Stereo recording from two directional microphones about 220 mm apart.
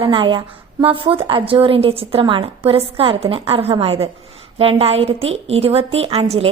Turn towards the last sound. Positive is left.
turn(degrees=-25)  # may be behind; listen again after turning